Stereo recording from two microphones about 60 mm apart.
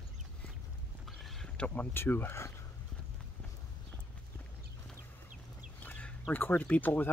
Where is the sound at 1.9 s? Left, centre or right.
Left.